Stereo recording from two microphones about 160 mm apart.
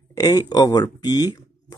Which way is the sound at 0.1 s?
20° left (ahead or behind).